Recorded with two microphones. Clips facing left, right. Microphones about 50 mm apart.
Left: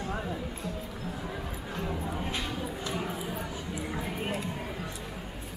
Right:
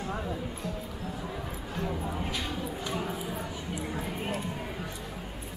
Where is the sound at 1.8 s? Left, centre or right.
Centre.